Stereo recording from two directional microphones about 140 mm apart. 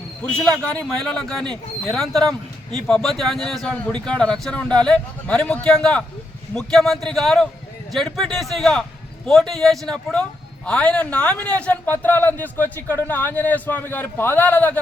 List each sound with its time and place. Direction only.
0.2 s a man's voice: 10° left (ahead or behind)